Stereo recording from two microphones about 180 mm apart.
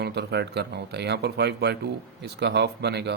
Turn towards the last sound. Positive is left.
turn(degrees=-70)  # may be behind; listen again after turning